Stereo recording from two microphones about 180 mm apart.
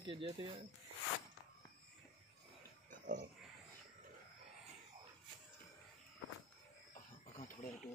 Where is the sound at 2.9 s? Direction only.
45° right (ahead or behind).